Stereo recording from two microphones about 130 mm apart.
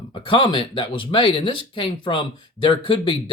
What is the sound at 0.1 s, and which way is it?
Speech, 40° left (ahead or behind).